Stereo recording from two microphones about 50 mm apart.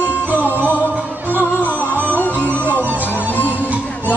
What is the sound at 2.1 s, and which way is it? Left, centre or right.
Music, left.